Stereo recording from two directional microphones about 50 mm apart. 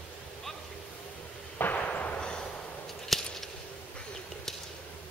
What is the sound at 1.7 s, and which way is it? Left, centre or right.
Artillery fire, left.